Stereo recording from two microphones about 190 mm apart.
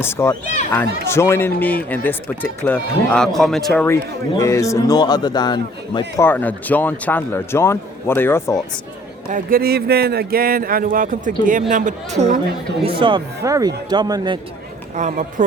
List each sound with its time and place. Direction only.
0.0 s a man's voice: 15° left (ahead or behind)
6.2 s a man's voice: 10° left (ahead or behind)
9.3 s speech: 50° right (ahead or behind)
12.8 s speech: 25° right (ahead or behind)
14.9 s speech: 40° right (ahead or behind)